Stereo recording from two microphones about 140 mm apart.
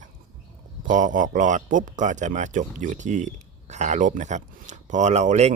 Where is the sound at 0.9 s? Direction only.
65° right (ahead or behind).